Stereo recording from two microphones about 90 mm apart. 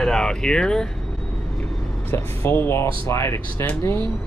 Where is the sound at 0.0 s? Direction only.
5° left (ahead or behind).